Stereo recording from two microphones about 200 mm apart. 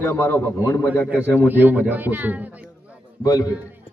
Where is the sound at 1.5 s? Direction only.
10° right (ahead or behind).